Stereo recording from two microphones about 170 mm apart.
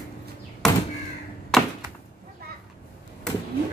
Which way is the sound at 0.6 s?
Centre (ahead or behind).